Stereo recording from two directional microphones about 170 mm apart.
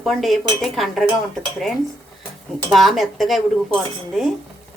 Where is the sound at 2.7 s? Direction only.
Centre (ahead or behind).